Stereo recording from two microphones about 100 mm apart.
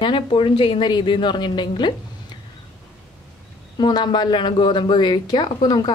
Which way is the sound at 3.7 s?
45° left (ahead or behind).